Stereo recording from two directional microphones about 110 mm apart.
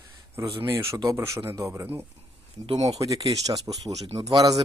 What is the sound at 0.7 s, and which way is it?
Speech, 25° right (ahead or behind).